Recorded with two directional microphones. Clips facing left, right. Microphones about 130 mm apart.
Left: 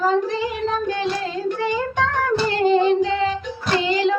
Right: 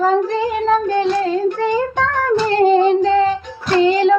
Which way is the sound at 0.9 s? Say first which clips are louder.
Right 7 dB; 45° right (ahead or behind).